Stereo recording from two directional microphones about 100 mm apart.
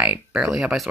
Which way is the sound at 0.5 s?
5° right (ahead or behind).